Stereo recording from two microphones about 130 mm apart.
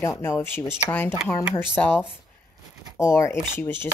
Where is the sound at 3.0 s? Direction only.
20° left (ahead or behind).